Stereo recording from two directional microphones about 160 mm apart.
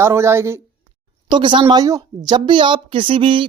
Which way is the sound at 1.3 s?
30° right (ahead or behind).